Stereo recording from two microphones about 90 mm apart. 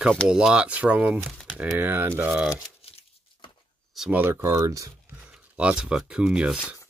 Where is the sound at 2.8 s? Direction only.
90° left.